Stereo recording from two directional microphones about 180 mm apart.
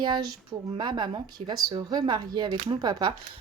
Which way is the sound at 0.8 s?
25° right (ahead or behind).